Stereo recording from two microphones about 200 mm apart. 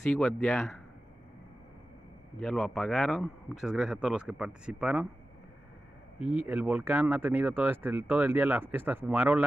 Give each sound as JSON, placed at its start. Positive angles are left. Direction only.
{"t": 0.0, "sound": "speech", "side_deg": 5}
{"t": 2.4, "sound": "speech", "side_deg": 5}
{"t": 6.1, "sound": "speech", "side_deg": 30}
{"t": 6.4, "sound": "speech", "side_deg": -10}